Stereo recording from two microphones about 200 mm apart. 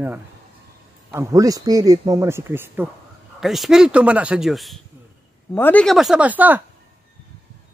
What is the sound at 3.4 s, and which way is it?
Speech, centre (ahead or behind).